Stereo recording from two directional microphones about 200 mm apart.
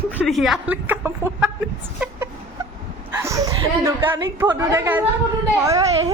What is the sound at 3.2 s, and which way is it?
Speech, 15° right (ahead or behind).